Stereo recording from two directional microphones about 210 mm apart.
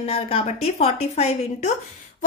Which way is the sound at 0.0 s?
30° left (ahead or behind).